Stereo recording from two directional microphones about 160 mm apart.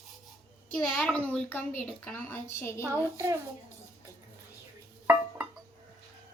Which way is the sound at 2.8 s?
15° right (ahead or behind).